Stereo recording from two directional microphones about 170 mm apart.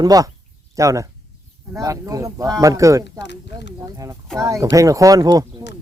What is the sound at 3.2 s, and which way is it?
Speech, 90° left.